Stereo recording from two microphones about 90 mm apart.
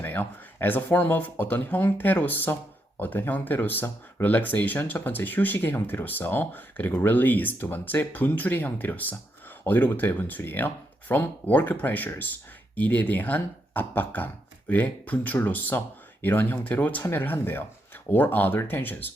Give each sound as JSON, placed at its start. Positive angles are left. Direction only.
{"t": 0.0, "sound": "speech", "side_deg": 20}